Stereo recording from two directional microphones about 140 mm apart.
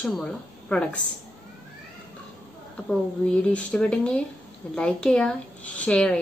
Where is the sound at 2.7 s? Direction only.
10° left (ahead or behind).